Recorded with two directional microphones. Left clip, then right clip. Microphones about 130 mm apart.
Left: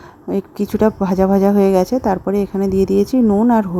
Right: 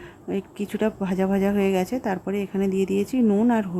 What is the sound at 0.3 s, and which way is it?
Speech, 25° left (ahead or behind).